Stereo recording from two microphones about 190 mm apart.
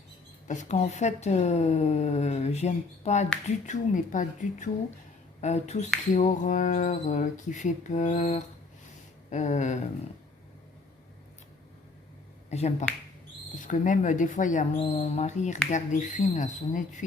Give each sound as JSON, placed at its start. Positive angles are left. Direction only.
{"t": 0.4, "sound": "speech", "side_deg": 40}
{"t": 12.5, "sound": "speech", "side_deg": 35}